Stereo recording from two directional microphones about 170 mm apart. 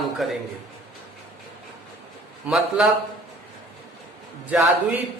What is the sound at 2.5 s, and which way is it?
Speech, 10° right (ahead or behind).